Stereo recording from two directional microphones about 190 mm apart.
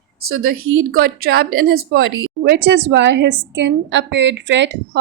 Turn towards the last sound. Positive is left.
turn(degrees=-70)  # may be behind; listen again after turning